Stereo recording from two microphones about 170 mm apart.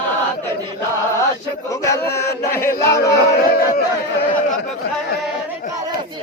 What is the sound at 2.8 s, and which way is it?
Speech, 75° left (ahead or behind).